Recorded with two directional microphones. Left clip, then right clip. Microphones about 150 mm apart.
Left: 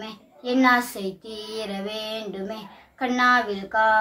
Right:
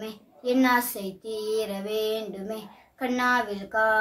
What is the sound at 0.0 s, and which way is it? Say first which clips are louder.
A child's voice: right 1 dB; 15° right (ahead or behind).